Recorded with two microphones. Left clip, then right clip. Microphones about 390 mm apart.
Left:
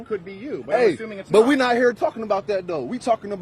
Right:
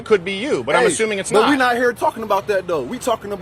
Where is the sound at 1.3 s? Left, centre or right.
Left.